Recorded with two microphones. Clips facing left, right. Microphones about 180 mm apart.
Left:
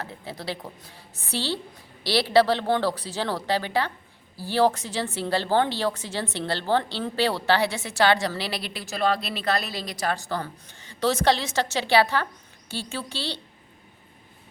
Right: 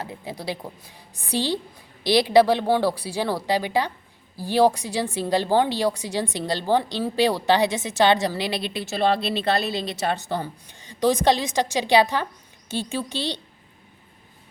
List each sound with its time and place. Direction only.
0.0 s a woman's voice: 15° right (ahead or behind)